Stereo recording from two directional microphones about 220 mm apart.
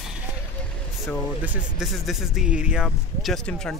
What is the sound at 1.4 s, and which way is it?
Speech, 5° right (ahead or behind).